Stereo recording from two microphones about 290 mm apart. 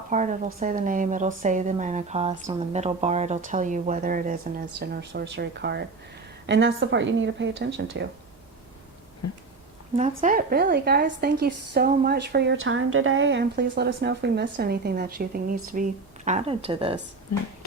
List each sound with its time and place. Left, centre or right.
0.1 s a woman's voice: right
9.2 s a sound: left
10.0 s a woman's voice: right